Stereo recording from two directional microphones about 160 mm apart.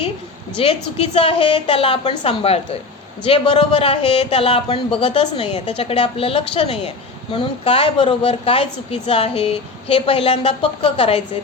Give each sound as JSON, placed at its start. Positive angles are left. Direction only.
{"t": 0.5, "sound": "speech", "side_deg": 35}